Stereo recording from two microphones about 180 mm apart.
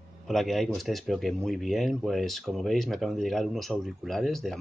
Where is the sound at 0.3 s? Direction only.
Centre (ahead or behind).